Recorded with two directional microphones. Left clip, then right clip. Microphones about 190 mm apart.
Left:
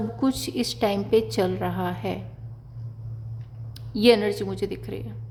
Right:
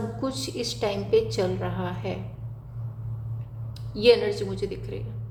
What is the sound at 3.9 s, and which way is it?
A woman's voice, 30° left (ahead or behind).